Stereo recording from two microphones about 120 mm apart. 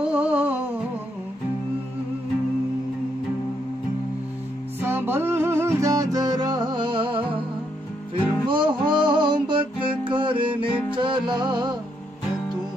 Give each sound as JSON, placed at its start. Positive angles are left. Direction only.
{"t": 0.0, "sound": "music", "side_deg": -10}
{"t": 4.8, "sound": "music", "side_deg": -20}
{"t": 8.5, "sound": "music", "side_deg": -45}